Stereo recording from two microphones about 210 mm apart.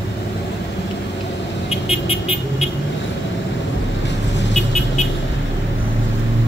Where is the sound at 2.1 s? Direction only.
25° left (ahead or behind).